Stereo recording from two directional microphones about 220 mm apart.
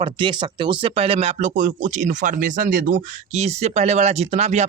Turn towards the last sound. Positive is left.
turn(degrees=-30)  # may be behind; listen again after turning